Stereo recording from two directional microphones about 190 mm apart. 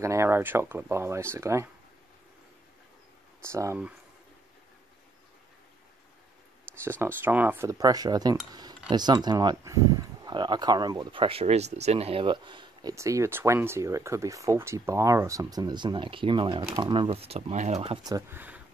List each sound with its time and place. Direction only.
0.0 s speech: 15° right (ahead or behind)
3.4 s speech: 15° right (ahead or behind)
6.8 s speech: 10° right (ahead or behind); by 17.9 s 35° right (ahead or behind)
18.0 s speech: 15° right (ahead or behind)